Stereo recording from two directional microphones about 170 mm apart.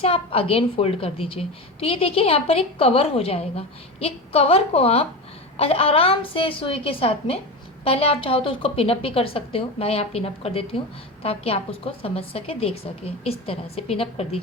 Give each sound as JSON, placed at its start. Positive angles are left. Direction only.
{"t": 0.0, "sound": "a woman's voice", "side_deg": 35}